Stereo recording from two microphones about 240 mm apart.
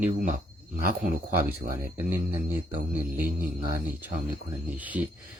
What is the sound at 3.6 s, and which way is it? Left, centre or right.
Speech, centre.